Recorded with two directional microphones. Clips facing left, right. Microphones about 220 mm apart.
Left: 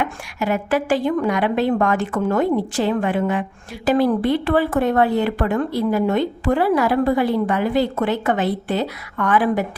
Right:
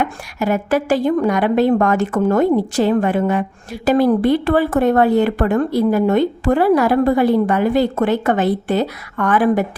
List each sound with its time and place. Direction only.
0.0 s speech: 40° right (ahead or behind)